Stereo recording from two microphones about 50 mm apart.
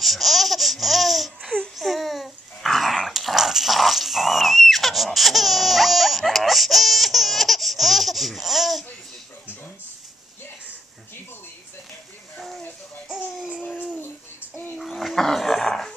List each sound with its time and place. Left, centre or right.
0.0 s laughter: centre
1.8 s dog: centre
14.0 s child singing: left
14.8 s dog: centre